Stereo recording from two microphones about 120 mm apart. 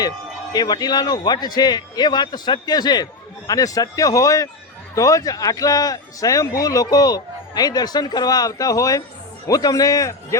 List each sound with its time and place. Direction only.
0.5 s a man's voice: 35° left (ahead or behind)